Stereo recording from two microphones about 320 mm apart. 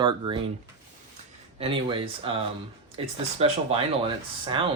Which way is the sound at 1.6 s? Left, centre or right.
Centre.